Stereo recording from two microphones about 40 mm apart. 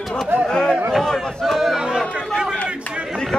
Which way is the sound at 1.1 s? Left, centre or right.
Centre.